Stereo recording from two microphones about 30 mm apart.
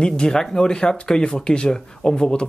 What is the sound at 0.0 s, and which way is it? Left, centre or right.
Speech, left.